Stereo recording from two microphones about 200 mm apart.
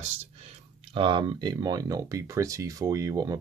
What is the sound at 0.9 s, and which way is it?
Speech, 25° right (ahead or behind).